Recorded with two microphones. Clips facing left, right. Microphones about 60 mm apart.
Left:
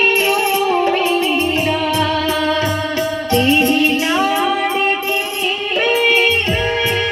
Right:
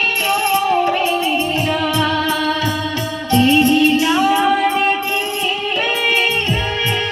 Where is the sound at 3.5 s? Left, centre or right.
Left.